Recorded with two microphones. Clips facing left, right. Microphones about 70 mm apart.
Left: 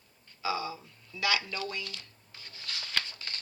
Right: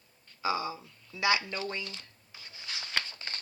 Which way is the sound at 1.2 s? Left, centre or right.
Right.